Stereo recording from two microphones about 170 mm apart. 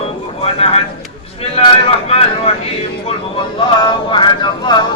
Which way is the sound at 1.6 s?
35° left (ahead or behind).